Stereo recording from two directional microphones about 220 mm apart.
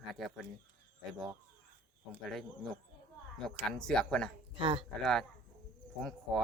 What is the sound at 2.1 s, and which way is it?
Speech, centre (ahead or behind).